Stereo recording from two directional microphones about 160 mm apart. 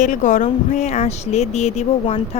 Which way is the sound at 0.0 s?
50° left (ahead or behind).